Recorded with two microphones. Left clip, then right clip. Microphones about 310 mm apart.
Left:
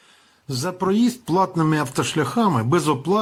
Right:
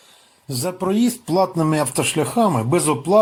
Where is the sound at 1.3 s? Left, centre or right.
Left.